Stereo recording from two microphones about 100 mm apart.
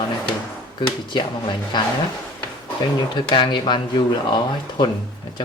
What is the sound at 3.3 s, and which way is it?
Speech, 55° left (ahead or behind).